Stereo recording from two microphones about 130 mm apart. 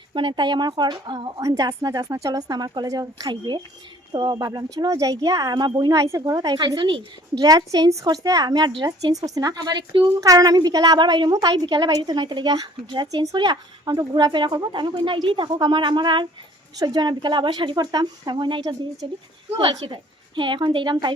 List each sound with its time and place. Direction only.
0.1 s speech: 40° right (ahead or behind)